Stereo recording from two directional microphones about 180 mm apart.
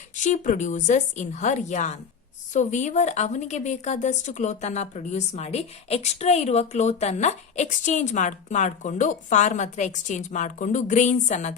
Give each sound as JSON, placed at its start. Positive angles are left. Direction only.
{"t": 0.2, "sound": "a woman's voice", "side_deg": 45}